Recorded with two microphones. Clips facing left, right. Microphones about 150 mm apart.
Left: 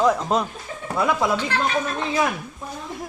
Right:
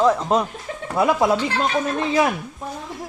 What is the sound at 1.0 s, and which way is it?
Speech, 25° right (ahead or behind).